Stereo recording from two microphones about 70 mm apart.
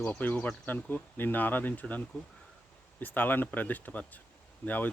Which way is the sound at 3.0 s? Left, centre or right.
Left.